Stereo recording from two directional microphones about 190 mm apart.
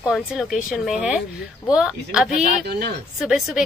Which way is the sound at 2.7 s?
60° right (ahead or behind).